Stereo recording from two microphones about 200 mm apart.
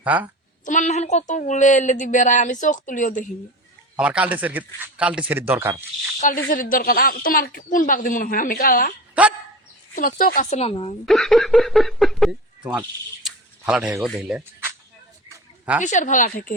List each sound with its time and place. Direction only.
0.0 s a woman's voice: 10° right (ahead or behind)
0.6 s a woman's voice: 40° left (ahead or behind)
3.9 s a man's voice: 5° right (ahead or behind)
6.1 s speech: 40° left (ahead or behind)
9.2 s a man's voice: 5° right (ahead or behind)
9.9 s a woman's voice: 45° left (ahead or behind)
11.0 s speech: centre (ahead or behind)
15.3 s a sound: 5° right (ahead or behind)
15.8 s a woman's voice: 40° left (ahead or behind)